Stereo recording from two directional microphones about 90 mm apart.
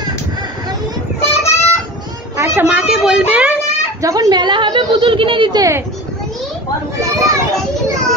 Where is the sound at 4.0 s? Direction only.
40° right (ahead or behind); by 5.5 s 75° right (ahead or behind).